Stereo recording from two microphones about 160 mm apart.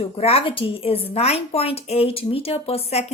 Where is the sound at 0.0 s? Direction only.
40° left (ahead or behind).